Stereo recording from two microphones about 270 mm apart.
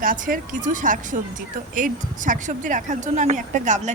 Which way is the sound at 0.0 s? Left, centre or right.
Right.